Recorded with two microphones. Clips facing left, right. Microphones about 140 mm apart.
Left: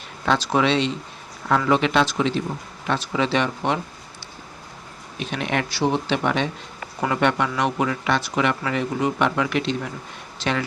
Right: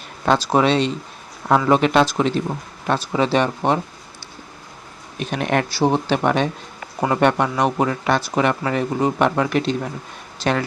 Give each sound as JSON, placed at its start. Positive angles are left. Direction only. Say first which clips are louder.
{"t": 0.3, "sound": "speech", "louder": "right 3 dB", "side_deg": -40}
{"t": 5.2, "sound": "speech", "louder": "right 4 dB", "side_deg": -45}